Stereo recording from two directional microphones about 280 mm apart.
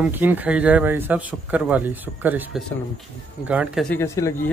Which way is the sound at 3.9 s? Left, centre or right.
Centre.